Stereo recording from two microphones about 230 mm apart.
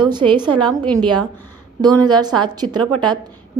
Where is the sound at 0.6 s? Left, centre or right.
Centre.